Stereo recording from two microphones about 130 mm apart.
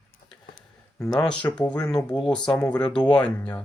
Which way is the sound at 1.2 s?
10° left (ahead or behind).